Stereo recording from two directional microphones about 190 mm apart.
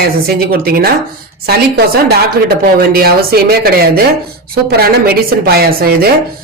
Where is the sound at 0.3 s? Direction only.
55° right (ahead or behind).